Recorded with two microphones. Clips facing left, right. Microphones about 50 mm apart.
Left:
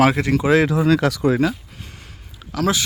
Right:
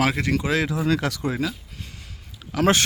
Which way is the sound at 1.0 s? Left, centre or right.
Left.